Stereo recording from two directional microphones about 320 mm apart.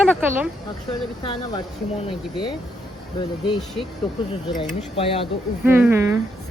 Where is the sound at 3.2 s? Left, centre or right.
Centre.